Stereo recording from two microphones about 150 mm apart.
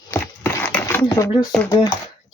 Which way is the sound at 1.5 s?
5° left (ahead or behind).